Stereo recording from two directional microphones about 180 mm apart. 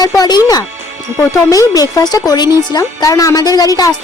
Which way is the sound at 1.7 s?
20° left (ahead or behind).